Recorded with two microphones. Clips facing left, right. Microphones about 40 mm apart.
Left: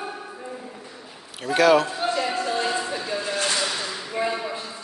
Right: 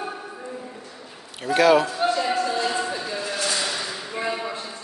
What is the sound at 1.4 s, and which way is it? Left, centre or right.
Speech, centre.